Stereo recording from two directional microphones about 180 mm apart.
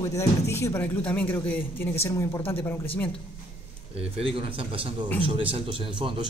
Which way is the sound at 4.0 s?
30° right (ahead or behind).